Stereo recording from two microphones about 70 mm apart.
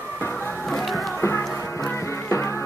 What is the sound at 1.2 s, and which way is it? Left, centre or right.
Music, left.